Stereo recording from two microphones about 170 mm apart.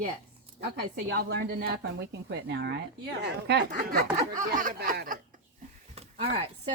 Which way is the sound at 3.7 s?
55° right (ahead or behind).